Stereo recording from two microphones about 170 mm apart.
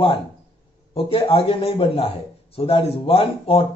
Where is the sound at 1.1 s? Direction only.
30° left (ahead or behind).